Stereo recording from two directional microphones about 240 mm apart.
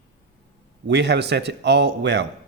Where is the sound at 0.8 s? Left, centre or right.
Right.